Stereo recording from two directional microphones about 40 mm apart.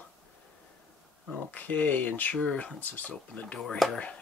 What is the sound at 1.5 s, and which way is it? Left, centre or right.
Speech, left.